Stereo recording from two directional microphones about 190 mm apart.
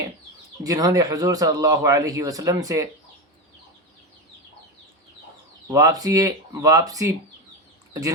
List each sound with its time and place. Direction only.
0.6 s speech: 20° right (ahead or behind)
5.7 s speech: 20° right (ahead or behind)